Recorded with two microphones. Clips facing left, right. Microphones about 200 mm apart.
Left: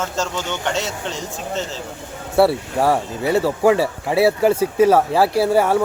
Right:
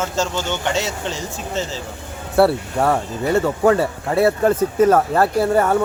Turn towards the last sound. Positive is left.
turn(degrees=5)  # may be behind; listen again after turning